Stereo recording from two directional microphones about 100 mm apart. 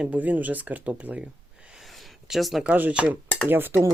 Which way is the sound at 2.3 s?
Centre (ahead or behind).